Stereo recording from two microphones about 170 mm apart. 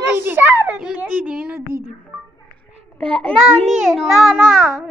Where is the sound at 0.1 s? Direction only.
10° right (ahead or behind).